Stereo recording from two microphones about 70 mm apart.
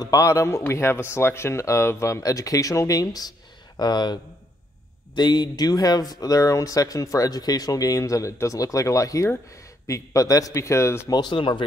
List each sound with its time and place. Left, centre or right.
0.0 s speech: left
11.1 s speech: left